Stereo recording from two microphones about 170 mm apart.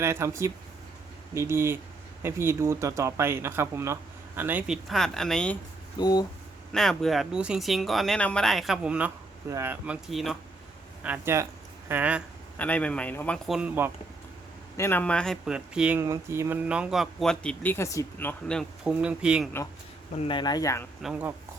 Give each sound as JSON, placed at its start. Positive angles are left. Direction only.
{"t": 0.0, "sound": "speech", "side_deg": -15}
{"t": 6.0, "sound": "speech", "side_deg": 25}
{"t": 6.7, "sound": "speech", "side_deg": 0}
{"t": 11.0, "sound": "speech", "side_deg": -10}
{"t": 12.5, "sound": "a man's voice", "side_deg": 10}
{"t": 13.6, "sound": "speech", "side_deg": -10}
{"t": 14.8, "sound": "speech", "side_deg": 10}
{"t": 16.0, "sound": "speech", "side_deg": -15}
{"t": 18.9, "sound": "speech", "side_deg": -5}
{"t": 20.1, "sound": "speech", "side_deg": 30}
{"t": 21.0, "sound": "speech", "side_deg": -5}